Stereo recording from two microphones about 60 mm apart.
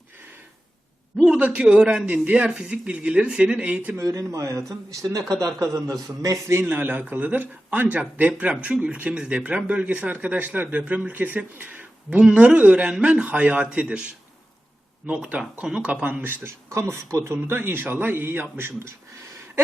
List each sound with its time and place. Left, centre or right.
1.4 s a man's voice: centre
3.9 s a man's voice: right
6.5 s a man's voice: right
12.2 s a man's voice: centre
15.1 s a man's voice: centre
16.2 s a man's voice: right
16.6 s a man's voice: right